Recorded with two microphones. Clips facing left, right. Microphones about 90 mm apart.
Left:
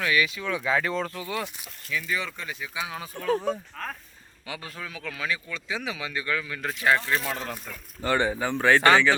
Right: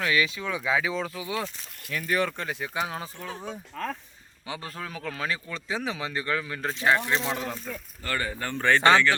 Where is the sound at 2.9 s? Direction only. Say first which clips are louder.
Right 1 dB; 35° right (ahead or behind).